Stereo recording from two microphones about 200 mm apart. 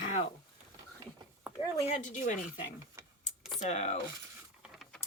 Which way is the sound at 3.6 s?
35° left (ahead or behind).